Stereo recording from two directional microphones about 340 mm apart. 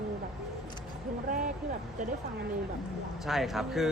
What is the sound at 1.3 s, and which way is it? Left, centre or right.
Speech, right.